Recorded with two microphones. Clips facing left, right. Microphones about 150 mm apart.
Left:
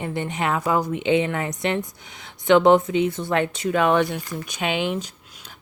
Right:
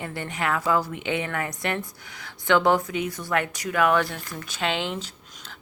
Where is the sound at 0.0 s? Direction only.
20° left (ahead or behind).